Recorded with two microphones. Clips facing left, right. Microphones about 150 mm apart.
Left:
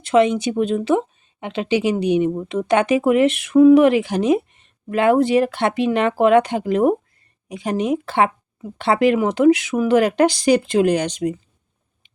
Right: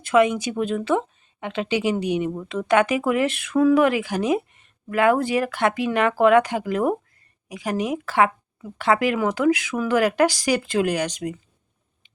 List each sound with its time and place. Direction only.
0.0 s speech: 25° left (ahead or behind)